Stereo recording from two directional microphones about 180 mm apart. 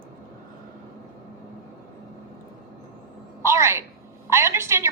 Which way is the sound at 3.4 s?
15° right (ahead or behind).